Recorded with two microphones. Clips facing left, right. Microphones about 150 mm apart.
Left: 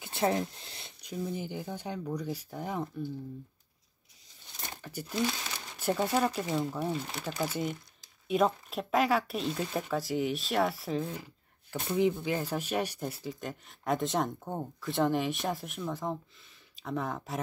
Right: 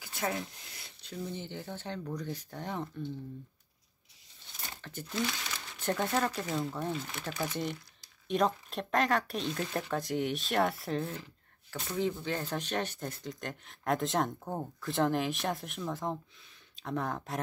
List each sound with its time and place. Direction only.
0.0 s a sound: 25° left (ahead or behind)
1.0 s speech: 10° left (ahead or behind)
4.6 s speech: 10° left (ahead or behind)
11.9 s speech: 10° left (ahead or behind)